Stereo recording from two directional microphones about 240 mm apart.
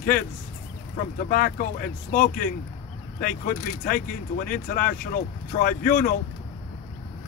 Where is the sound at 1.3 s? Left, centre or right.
Left.